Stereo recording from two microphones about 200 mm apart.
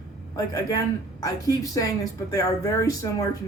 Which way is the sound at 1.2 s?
15° left (ahead or behind).